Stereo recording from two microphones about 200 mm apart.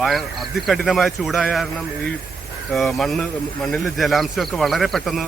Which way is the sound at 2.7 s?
Centre (ahead or behind).